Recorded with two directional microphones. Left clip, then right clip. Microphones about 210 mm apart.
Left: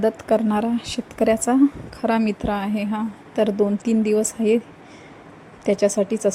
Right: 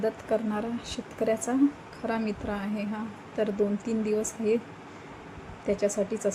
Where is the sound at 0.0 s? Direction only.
45° left (ahead or behind).